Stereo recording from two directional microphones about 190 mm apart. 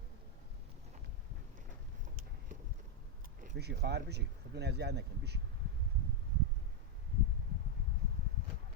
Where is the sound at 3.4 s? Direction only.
55° right (ahead or behind).